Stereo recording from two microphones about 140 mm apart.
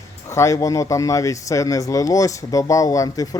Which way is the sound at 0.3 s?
20° left (ahead or behind).